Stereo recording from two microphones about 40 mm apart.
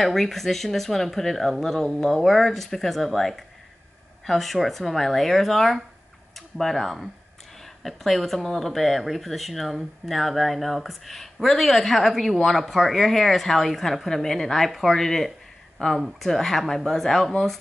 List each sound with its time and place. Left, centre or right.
0.0 s speech: centre
15.8 s speech: left
16.2 s speech: centre